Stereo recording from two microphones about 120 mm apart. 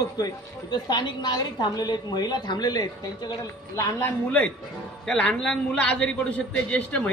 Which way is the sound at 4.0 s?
10° left (ahead or behind).